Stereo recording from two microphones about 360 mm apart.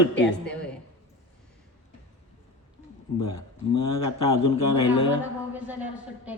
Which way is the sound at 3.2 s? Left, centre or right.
Centre.